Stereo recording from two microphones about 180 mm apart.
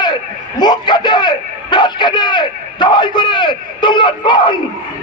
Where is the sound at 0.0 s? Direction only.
25° left (ahead or behind).